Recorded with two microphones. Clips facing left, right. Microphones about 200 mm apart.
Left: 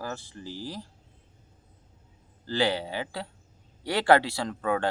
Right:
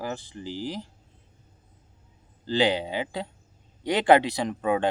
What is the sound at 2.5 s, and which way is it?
Speech, 20° right (ahead or behind).